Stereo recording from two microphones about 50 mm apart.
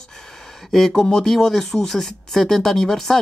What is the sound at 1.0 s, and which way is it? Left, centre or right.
Speech, centre.